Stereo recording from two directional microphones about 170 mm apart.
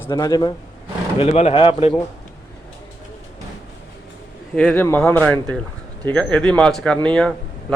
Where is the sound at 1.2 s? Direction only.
40° left (ahead or behind).